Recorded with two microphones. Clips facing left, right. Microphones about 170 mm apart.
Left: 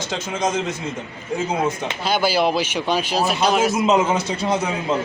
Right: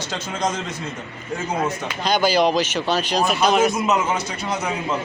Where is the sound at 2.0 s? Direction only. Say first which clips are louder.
Right 1 dB; 5° left (ahead or behind).